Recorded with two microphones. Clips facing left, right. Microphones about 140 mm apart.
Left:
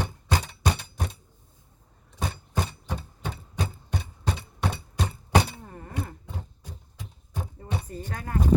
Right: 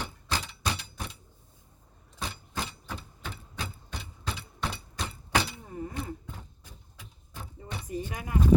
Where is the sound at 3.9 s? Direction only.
55° left (ahead or behind).